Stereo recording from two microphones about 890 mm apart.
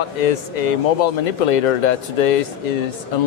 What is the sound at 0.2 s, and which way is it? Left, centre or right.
A man's voice, left.